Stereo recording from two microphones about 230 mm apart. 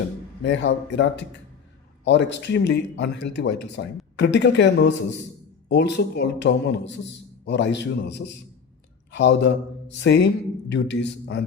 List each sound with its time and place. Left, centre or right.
0.4 s a man's voice: left